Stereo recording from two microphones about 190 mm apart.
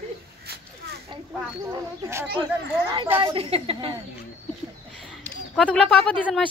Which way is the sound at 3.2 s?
30° right (ahead or behind).